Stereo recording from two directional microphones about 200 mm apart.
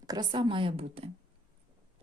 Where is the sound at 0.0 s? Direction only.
20° right (ahead or behind).